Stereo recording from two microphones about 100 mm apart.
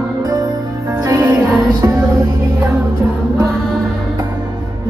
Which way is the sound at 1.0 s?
25° right (ahead or behind).